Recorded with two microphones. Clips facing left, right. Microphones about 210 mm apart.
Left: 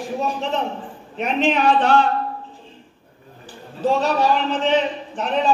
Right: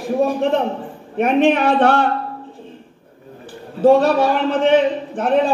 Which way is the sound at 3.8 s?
55° right (ahead or behind).